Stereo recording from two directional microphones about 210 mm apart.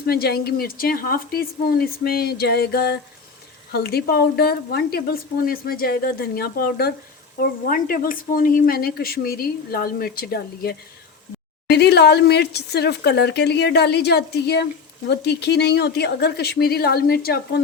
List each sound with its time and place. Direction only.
0.0 s a woman's voice: 50° left (ahead or behind)